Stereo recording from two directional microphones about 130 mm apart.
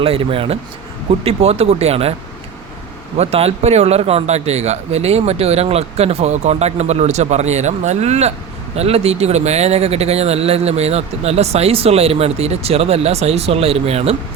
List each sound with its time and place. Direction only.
0.0 s speech: 45° right (ahead or behind)
3.2 s a man's voice: 55° right (ahead or behind)